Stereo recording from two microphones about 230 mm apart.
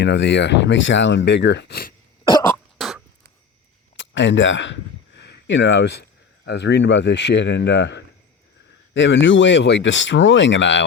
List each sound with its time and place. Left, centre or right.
0.0 s speech: left
2.7 s a sound: centre
3.9 s speech: left